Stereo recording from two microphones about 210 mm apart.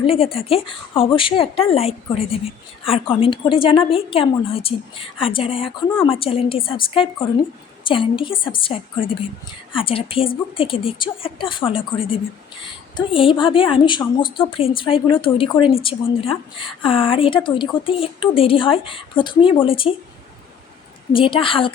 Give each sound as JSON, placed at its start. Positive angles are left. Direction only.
{"t": 0.0, "sound": "a woman's voice", "side_deg": 25}
{"t": 7.9, "sound": "a woman's voice", "side_deg": 25}
{"t": 21.2, "sound": "a woman's voice", "side_deg": 25}